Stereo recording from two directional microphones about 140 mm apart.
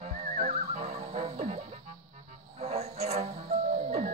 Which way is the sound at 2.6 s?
50° right (ahead or behind).